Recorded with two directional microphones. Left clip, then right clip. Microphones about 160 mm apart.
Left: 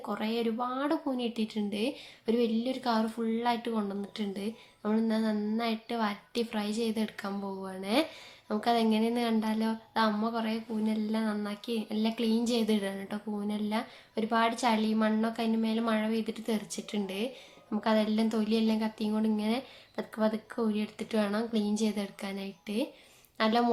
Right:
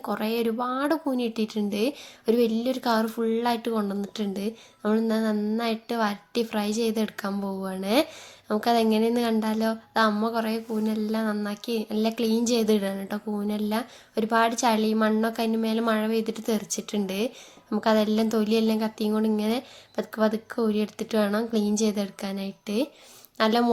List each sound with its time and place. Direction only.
0.0 s a woman's voice: 40° right (ahead or behind)